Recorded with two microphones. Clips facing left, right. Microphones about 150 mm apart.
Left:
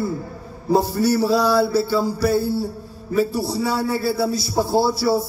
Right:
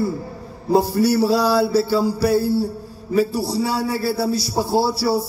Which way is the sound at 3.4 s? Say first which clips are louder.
Right 1 dB; 30° right (ahead or behind).